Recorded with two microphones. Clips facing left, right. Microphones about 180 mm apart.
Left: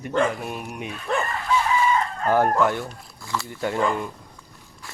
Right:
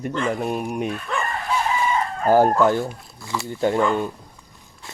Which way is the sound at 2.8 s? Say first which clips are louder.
Right 5 dB; 15° right (ahead or behind).